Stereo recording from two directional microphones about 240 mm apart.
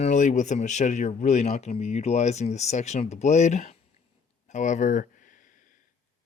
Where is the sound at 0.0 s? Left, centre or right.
Left.